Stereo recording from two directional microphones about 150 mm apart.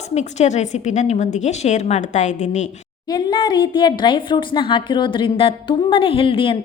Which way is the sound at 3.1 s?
30° left (ahead or behind).